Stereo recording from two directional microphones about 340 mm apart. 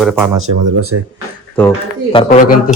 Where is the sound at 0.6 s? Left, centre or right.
Right.